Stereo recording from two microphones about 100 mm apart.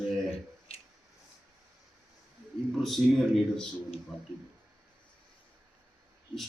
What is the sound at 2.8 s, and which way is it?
Speech, centre (ahead or behind).